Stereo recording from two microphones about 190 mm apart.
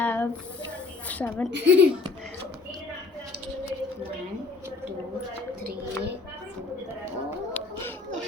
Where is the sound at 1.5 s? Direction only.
70° right (ahead or behind).